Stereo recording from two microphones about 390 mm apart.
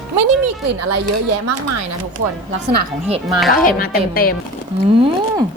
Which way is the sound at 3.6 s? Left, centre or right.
Left.